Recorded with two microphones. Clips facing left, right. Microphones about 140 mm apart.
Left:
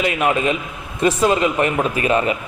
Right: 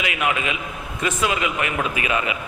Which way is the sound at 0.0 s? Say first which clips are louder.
Left 6 dB; 35° left (ahead or behind).